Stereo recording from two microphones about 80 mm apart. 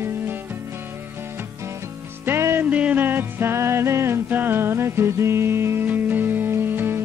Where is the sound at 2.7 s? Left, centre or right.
Centre.